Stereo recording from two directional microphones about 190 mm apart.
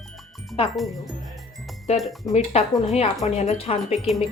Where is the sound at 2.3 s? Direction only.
35° left (ahead or behind).